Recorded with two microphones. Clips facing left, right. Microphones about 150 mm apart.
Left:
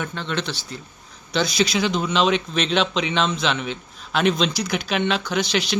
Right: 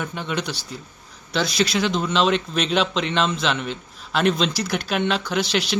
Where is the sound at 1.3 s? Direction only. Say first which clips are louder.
Left 1 dB; centre (ahead or behind).